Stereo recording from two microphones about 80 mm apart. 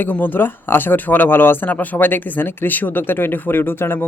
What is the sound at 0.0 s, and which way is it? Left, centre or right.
Speech, left.